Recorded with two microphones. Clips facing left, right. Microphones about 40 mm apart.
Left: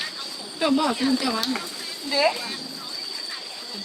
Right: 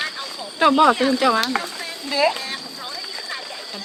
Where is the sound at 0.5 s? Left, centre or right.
Right.